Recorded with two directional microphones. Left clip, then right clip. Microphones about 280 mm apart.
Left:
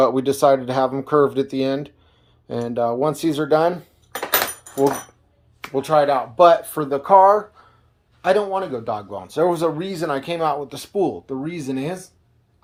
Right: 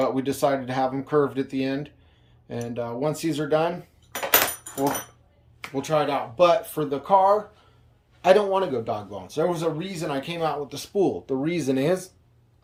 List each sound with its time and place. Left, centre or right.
0.0 s speech: centre
5.6 s speech: centre
8.2 s speech: centre
11.3 s speech: centre